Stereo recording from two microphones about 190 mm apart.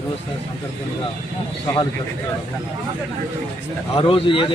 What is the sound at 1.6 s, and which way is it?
Speech, 20° left (ahead or behind).